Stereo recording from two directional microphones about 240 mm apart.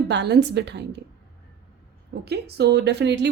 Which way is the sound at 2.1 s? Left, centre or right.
Right.